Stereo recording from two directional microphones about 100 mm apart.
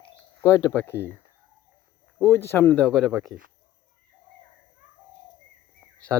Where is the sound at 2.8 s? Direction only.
5° left (ahead or behind).